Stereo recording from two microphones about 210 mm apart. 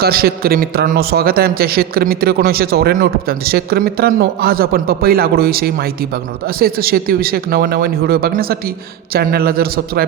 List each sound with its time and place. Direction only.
0.0 s speech: 45° right (ahead or behind)